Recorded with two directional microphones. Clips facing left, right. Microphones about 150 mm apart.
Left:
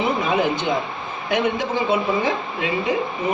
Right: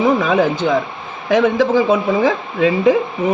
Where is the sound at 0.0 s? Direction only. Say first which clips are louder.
Right 6 dB; 90° right.